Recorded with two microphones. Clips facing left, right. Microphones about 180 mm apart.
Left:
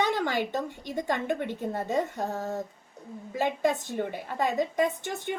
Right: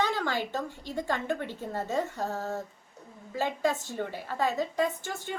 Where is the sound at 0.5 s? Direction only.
20° left (ahead or behind).